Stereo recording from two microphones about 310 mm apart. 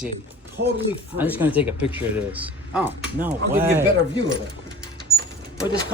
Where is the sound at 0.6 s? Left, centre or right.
Right.